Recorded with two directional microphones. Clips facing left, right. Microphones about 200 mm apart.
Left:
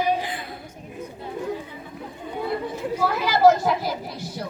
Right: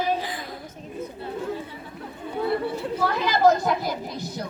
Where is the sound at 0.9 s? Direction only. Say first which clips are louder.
Right 1 dB; 15° left (ahead or behind).